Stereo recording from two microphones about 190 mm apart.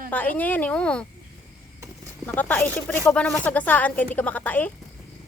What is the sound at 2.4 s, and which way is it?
Speech, 10° left (ahead or behind).